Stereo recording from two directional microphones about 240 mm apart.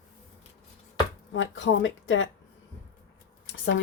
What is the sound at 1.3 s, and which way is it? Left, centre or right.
Speech, left.